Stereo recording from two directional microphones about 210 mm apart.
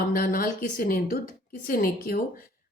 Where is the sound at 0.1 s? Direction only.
40° left (ahead or behind).